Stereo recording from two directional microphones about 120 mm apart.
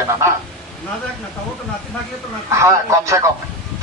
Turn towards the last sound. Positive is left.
turn(degrees=-25)  # may be behind; listen again after turning